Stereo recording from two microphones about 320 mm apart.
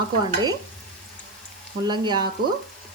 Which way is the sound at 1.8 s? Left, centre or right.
Centre.